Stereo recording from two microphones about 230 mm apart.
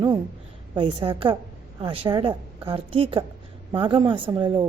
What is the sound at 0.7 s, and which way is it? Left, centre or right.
A woman's voice, centre.